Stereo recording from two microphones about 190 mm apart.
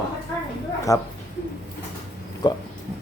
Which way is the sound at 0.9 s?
15° left (ahead or behind).